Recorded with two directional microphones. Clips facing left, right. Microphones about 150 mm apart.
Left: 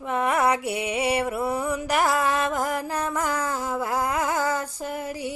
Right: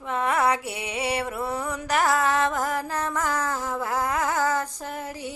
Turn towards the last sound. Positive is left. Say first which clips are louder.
# left 3 dB
turn(degrees=10)  # may be behind; listen again after turning